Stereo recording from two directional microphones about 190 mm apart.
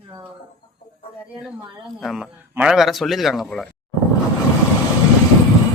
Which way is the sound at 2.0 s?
Centre (ahead or behind).